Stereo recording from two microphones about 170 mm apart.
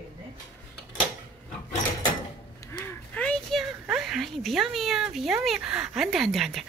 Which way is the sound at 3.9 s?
Centre (ahead or behind).